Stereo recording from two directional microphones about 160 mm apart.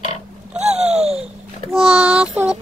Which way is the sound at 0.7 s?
40° right (ahead or behind).